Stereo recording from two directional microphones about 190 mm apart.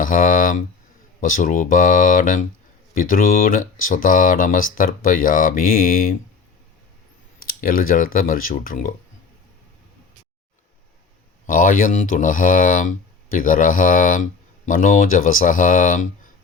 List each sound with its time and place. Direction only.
0.0 s speech: 45° left (ahead or behind)
7.4 s speech: 50° left (ahead or behind)
11.4 s speech: 45° left (ahead or behind)